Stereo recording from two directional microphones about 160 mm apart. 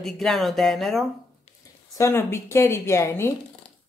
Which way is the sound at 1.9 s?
20° left (ahead or behind).